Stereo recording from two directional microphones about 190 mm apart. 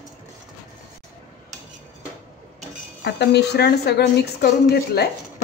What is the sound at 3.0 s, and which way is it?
A woman's voice, 60° left (ahead or behind).